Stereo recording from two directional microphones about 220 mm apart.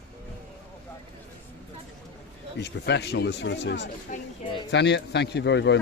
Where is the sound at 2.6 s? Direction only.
50° left (ahead or behind).